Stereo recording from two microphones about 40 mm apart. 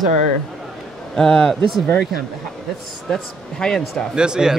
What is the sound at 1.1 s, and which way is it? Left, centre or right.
Speech, centre.